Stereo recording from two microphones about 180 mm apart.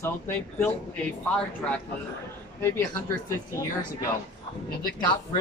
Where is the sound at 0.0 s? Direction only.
15° left (ahead or behind).